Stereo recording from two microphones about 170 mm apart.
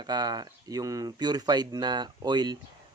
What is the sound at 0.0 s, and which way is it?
Speech, 25° right (ahead or behind).